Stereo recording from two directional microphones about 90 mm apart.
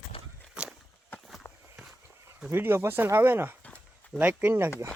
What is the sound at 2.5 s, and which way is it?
Speech, 25° right (ahead or behind).